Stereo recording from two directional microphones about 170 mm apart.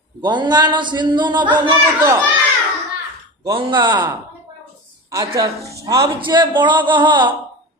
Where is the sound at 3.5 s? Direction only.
30° right (ahead or behind).